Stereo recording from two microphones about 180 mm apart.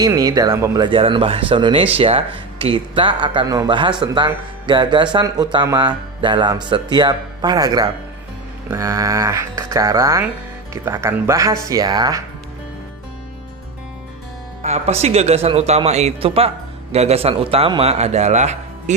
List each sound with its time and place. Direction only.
0.0 s speech: 20° right (ahead or behind)
14.6 s a man's voice: 35° right (ahead or behind)